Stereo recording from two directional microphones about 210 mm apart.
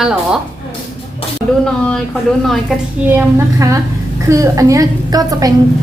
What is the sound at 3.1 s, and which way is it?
A woman's voice, 10° right (ahead or behind).